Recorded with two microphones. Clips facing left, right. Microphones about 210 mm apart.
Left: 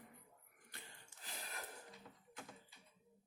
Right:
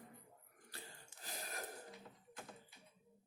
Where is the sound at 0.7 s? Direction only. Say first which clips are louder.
Right 4 dB; 40° right (ahead or behind).